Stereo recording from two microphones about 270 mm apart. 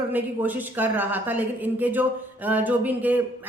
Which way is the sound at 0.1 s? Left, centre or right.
Centre.